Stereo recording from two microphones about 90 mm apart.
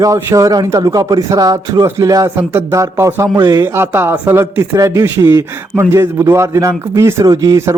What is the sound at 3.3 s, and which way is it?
Speech, 50° right (ahead or behind).